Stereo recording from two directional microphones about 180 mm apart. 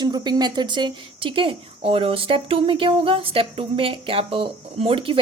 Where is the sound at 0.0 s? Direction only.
25° right (ahead or behind).